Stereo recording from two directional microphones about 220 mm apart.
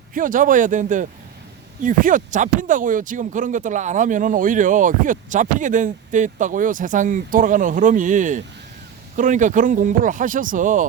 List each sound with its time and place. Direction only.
0.1 s speech: 40° right (ahead or behind)